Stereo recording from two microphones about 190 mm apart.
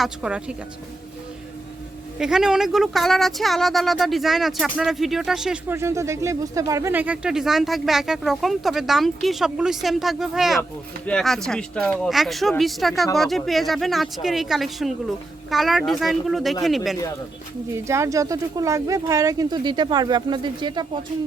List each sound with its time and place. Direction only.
0.0 s speech: 5° right (ahead or behind)
2.1 s speech: 5° right (ahead or behind)
5.7 s speech: 15° right (ahead or behind)
17.8 s speech: 15° right (ahead or behind)